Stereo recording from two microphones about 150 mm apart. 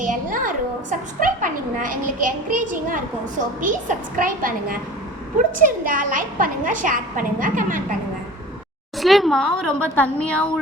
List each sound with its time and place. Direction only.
0.0 s a child's voice: 65° right (ahead or behind)
9.0 s a woman's voice: centre (ahead or behind)